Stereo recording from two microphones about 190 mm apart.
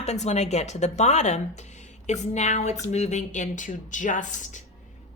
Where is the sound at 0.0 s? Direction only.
35° left (ahead or behind).